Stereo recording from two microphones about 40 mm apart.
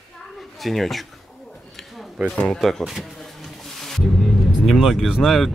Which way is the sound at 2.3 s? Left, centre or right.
Left.